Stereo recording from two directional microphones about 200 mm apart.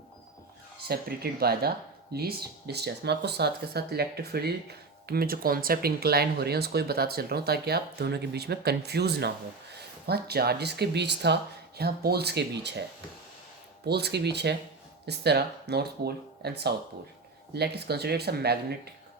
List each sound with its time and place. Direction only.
0.9 s speech: 50° right (ahead or behind)
13.8 s speech: 55° right (ahead or behind)